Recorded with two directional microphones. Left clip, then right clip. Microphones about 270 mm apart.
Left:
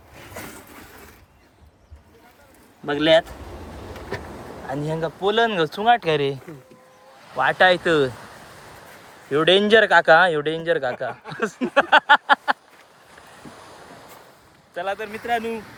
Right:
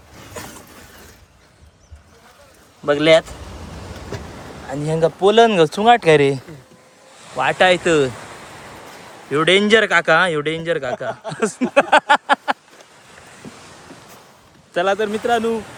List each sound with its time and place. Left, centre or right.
2.8 s a man's voice: centre
4.7 s a man's voice: centre
9.3 s a man's voice: centre
14.8 s speech: right
15.3 s speech: centre